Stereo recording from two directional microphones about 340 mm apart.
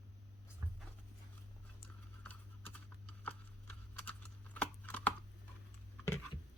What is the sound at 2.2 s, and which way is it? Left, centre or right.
Typing, centre.